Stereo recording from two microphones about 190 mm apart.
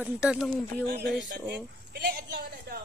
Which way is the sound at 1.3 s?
60° right (ahead or behind).